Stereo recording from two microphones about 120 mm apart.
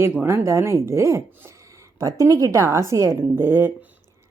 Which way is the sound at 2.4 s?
25° right (ahead or behind).